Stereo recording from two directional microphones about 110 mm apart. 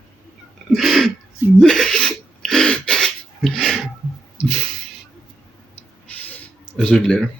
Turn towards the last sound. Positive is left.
turn(degrees=10)  # may be behind; listen again after turning